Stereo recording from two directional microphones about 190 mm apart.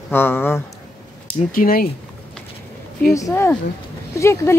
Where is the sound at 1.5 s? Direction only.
50° left (ahead or behind).